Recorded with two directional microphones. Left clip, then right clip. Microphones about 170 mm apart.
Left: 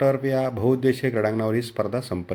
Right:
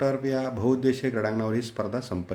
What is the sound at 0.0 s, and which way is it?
A man's voice, 15° left (ahead or behind).